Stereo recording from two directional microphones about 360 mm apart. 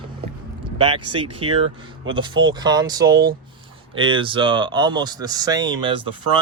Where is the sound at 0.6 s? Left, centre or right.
Centre.